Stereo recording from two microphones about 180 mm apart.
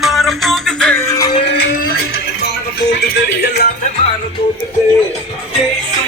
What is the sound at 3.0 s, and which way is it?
Music, 60° left (ahead or behind).